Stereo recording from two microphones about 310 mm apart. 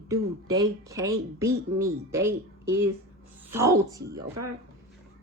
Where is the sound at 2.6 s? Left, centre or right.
Right.